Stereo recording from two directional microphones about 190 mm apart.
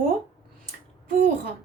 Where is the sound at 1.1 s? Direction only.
45° right (ahead or behind).